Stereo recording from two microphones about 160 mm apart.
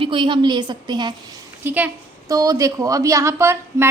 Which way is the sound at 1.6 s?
10° right (ahead or behind).